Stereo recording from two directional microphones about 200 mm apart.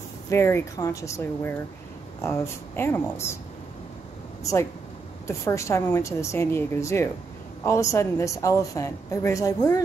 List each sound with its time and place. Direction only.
0.3 s a woman's voice: 10° left (ahead or behind)
5.2 s a woman's voice: 15° left (ahead or behind)